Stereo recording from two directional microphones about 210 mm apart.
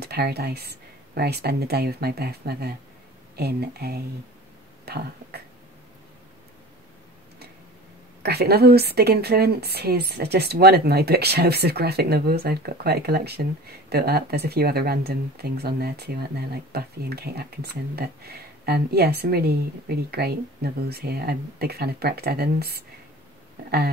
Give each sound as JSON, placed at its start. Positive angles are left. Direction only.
{"t": 0.0, "sound": "speech", "side_deg": -50}
{"t": 8.2, "sound": "speech", "side_deg": -50}